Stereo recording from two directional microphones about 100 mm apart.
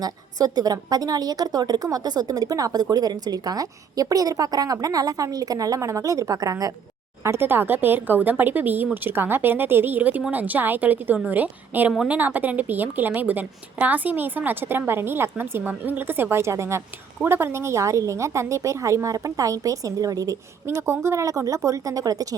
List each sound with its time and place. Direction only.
0.0 s a woman's voice: 40° right (ahead or behind)
7.3 s a woman's voice: 20° right (ahead or behind); by 22.4 s 40° right (ahead or behind)